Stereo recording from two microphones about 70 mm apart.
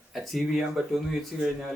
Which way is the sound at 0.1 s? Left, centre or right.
Centre.